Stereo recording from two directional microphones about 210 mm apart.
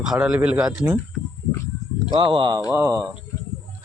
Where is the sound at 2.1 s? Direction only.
25° right (ahead or behind).